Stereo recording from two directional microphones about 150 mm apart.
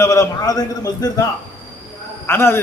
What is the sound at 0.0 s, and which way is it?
A man's voice, 20° left (ahead or behind).